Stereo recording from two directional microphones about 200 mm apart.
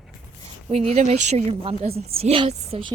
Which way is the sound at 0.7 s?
30° right (ahead or behind).